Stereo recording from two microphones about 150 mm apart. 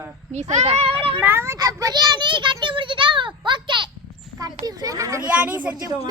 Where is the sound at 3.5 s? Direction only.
30° right (ahead or behind).